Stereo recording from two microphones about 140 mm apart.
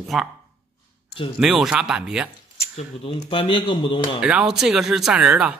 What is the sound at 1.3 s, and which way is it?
Speech, 5° right (ahead or behind).